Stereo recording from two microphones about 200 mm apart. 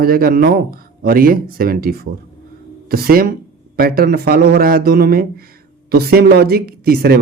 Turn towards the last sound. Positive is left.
turn(degrees=-50)  # may be behind; listen again after turning